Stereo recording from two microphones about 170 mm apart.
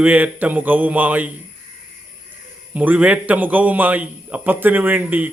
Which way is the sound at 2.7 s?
10° right (ahead or behind).